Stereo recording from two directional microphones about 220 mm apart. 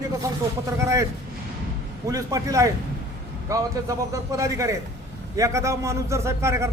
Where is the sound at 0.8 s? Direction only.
15° right (ahead or behind).